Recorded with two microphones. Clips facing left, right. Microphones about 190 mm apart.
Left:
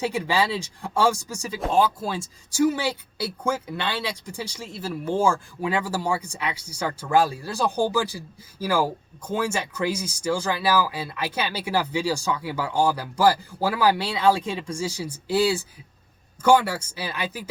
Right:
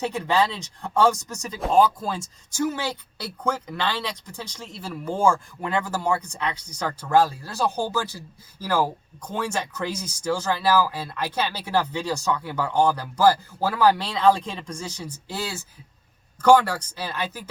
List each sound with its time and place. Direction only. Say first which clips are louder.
0.1 s speech: right 1 dB; 10° left (ahead or behind)
5.6 s speech: left 3 dB; 20° right (ahead or behind)
6.1 s speech: right 1 dB; 10° left (ahead or behind)